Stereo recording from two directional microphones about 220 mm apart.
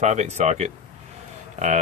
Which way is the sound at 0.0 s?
30° right (ahead or behind).